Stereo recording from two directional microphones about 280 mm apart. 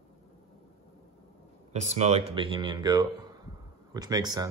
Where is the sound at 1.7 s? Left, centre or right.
Right.